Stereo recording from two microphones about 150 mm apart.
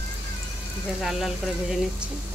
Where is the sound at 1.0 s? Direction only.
Centre (ahead or behind).